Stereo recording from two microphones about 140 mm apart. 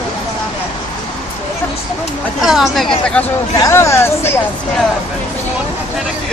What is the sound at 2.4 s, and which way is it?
Speech, 5° right (ahead or behind).